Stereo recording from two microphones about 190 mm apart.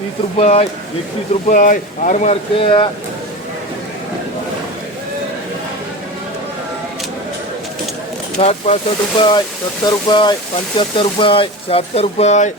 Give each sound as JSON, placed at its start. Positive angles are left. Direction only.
{"t": 0.3, "sound": "speech", "side_deg": 35}
{"t": 1.5, "sound": "speech", "side_deg": 45}
{"t": 8.4, "sound": "speech", "side_deg": 35}
{"t": 9.8, "sound": "speech", "side_deg": 25}